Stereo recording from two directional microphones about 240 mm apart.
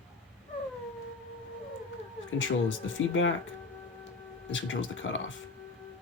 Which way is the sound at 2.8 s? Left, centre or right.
Left.